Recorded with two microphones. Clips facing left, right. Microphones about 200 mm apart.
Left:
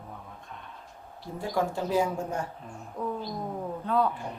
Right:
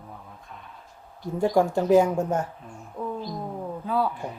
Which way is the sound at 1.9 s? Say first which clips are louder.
Right 10 dB; 70° right (ahead or behind).